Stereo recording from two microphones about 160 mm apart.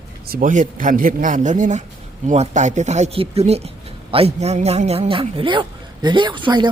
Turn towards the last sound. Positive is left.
turn(degrees=-30)  # may be behind; listen again after turning